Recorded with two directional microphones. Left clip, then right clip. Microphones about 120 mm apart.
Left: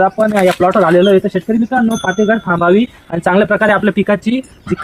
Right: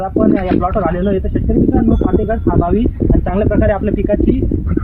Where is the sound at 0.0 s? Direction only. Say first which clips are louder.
Left 4 dB; 40° left (ahead or behind).